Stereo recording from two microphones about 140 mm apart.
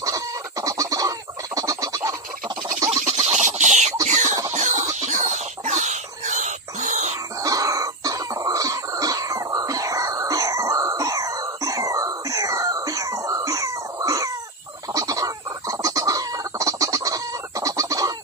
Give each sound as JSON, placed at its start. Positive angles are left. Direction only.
{"t": 0.0, "sound": "chicken", "side_deg": -25}
{"t": 2.9, "sound": "a sound", "side_deg": -50}
{"t": 7.4, "sound": "cough", "side_deg": -25}
{"t": 14.9, "sound": "chicken", "side_deg": -25}